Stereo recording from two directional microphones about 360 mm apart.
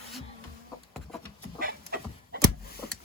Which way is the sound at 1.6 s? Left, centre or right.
Right.